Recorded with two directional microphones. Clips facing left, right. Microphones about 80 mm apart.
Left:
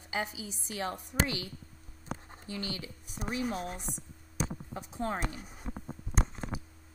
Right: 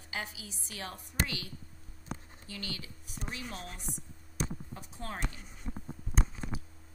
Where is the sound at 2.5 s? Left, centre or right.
Left.